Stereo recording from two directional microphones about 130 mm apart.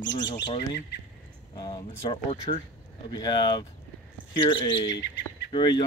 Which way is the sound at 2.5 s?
50° left (ahead or behind).